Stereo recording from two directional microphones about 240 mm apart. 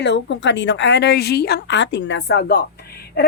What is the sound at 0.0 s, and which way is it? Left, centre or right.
A woman's voice, left.